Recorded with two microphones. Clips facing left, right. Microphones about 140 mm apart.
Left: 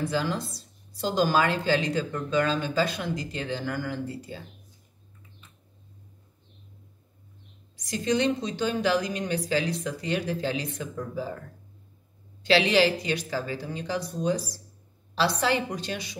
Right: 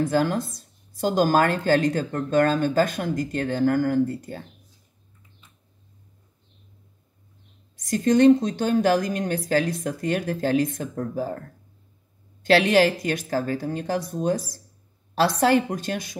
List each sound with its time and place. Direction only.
0.0 s speech: 50° right (ahead or behind)
7.7 s speech: 50° right (ahead or behind)
12.4 s speech: 50° right (ahead or behind)